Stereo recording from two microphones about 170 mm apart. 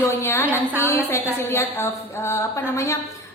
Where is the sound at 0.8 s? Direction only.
15° left (ahead or behind).